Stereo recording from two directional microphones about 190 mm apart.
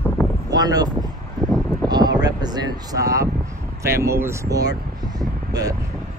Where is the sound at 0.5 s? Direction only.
20° right (ahead or behind).